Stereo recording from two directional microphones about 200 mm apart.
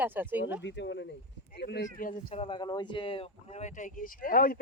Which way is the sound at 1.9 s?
40° left (ahead or behind).